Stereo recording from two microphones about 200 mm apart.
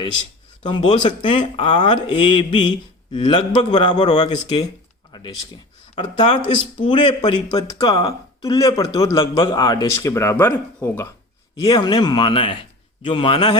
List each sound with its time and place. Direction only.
0.7 s speech: 30° left (ahead or behind)
4.0 s speech: 20° left (ahead or behind)
6.0 s speech: 25° left (ahead or behind)